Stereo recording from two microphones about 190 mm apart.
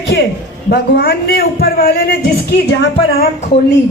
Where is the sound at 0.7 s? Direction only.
55° left (ahead or behind).